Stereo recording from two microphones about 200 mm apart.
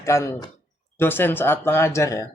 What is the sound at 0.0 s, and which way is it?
Speech, 15° left (ahead or behind).